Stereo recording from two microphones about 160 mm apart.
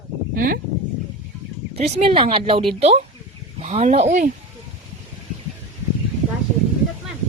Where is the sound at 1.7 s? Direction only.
40° right (ahead or behind).